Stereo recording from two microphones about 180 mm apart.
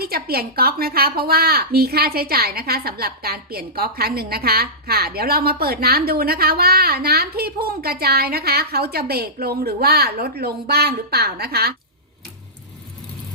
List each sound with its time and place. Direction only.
0.0 s a woman's voice: 60° right (ahead or behind)